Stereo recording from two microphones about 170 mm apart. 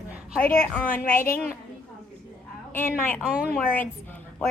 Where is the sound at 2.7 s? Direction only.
10° left (ahead or behind).